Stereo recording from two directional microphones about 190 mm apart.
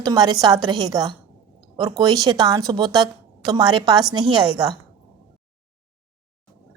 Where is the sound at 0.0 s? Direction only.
20° right (ahead or behind).